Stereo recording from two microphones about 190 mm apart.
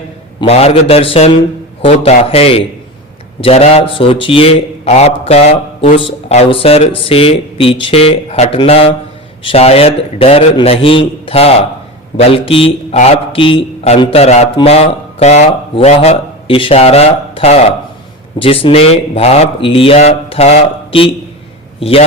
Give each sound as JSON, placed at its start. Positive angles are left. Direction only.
{"t": 0.3, "sound": "a man's voice", "side_deg": 30}